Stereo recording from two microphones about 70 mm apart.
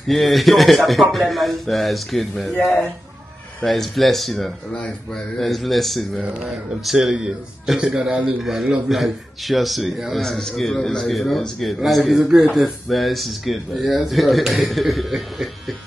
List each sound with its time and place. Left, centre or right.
0.1 s a man's voice: centre
12.9 s a man's voice: centre